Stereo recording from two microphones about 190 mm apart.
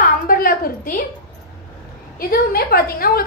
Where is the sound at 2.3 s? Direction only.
55° left (ahead or behind).